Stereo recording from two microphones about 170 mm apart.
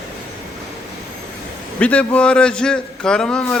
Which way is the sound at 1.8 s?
10° left (ahead or behind).